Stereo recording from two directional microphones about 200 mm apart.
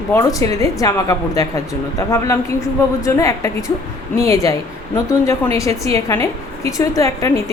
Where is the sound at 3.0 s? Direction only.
15° left (ahead or behind).